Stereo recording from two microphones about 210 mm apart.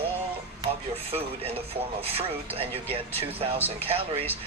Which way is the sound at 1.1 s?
30° right (ahead or behind).